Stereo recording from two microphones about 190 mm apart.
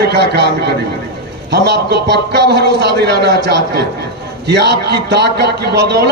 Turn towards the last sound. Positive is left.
turn(degrees=-60)  # may be behind; listen again after turning